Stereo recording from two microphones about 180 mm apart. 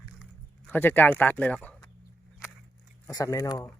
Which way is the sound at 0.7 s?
10° left (ahead or behind).